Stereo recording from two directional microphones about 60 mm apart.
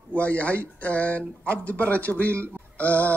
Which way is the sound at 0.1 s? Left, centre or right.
Left.